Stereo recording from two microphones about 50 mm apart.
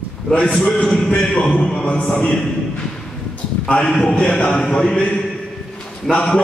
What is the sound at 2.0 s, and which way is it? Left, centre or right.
Music, left.